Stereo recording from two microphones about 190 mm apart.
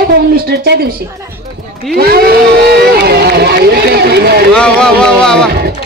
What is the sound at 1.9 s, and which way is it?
Speech, 55° right (ahead or behind).